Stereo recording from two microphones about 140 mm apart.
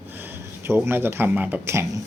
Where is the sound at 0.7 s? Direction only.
15° right (ahead or behind).